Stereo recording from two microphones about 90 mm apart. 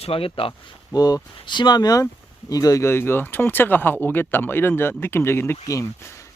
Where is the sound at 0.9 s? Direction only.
45° left (ahead or behind).